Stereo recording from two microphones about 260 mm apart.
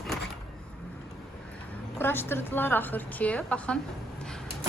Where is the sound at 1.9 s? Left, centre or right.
Centre.